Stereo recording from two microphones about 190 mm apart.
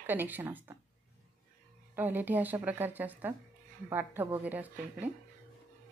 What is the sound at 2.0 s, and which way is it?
A woman's voice, 10° right (ahead or behind).